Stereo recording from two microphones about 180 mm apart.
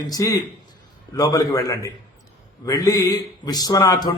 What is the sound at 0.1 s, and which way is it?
A man's voice, 15° left (ahead or behind).